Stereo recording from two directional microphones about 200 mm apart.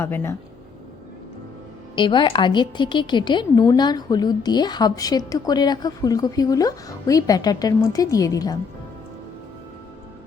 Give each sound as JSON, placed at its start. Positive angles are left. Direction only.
{"t": 0.0, "sound": "speech", "side_deg": 10}
{"t": 2.0, "sound": "a woman's voice", "side_deg": 25}